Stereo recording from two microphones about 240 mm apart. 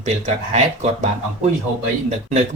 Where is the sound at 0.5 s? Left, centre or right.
Right.